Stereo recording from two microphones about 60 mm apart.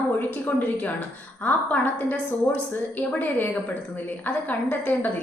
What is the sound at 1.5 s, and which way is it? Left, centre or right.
A woman's voice, left.